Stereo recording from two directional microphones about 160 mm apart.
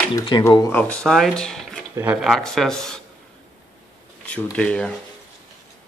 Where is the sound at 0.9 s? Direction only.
5° left (ahead or behind).